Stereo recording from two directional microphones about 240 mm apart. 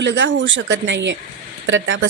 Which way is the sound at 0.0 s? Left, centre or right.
Right.